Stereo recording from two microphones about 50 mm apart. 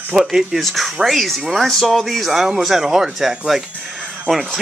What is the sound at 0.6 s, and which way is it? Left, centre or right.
Speech, centre.